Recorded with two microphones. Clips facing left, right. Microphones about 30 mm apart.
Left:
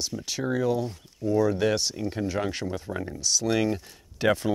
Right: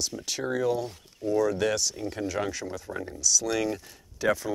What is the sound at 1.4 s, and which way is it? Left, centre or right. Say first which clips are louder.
Speech: left 2 dB; centre.